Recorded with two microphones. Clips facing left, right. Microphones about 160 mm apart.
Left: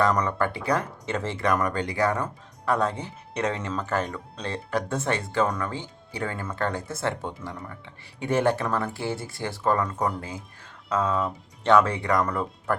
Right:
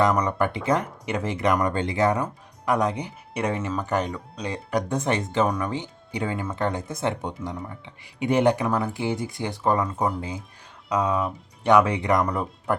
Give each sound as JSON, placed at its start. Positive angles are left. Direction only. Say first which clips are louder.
{"t": 0.0, "sound": "speech", "louder": "right 2 dB", "side_deg": -15}